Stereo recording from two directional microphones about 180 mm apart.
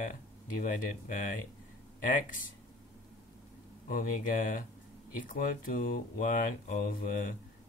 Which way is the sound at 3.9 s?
50° left (ahead or behind).